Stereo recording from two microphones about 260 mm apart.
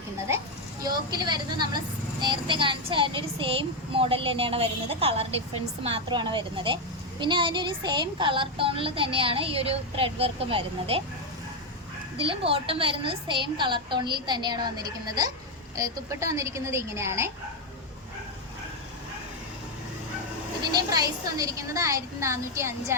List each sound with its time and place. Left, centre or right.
0.8 s a woman's voice: centre
12.1 s a woman's voice: centre
20.9 s a woman's voice: centre